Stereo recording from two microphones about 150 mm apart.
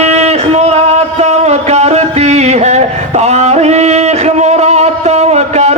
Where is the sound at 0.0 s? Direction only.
45° right (ahead or behind).